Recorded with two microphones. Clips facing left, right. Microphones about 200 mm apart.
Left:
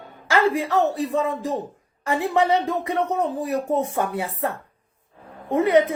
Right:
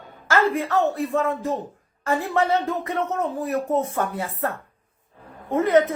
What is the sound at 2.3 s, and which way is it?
Speech, 15° left (ahead or behind).